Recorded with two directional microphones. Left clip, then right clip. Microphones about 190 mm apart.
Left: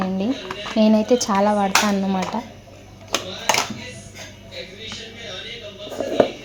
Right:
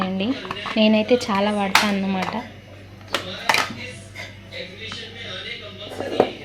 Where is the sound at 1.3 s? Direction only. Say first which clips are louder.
Left 3 dB; 10° right (ahead or behind).